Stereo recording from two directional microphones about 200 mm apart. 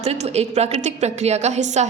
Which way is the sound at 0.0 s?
30° right (ahead or behind).